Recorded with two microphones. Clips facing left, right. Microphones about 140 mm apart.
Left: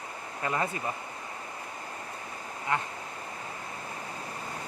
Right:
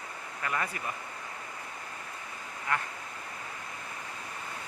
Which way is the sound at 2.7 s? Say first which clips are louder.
Left 2 dB; 20° left (ahead or behind).